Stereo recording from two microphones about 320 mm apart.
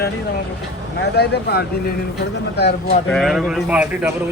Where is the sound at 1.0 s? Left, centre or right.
Left.